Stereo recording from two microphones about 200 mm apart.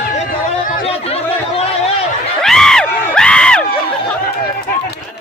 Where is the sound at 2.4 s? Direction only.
Centre (ahead or behind).